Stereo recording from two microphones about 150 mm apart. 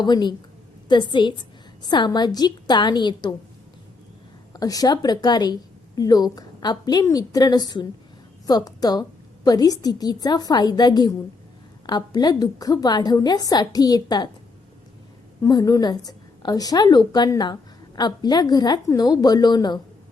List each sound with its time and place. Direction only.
0.0 s a woman's voice: 30° left (ahead or behind)
4.5 s a woman's voice: 25° left (ahead or behind)
15.4 s a woman's voice: 25° left (ahead or behind)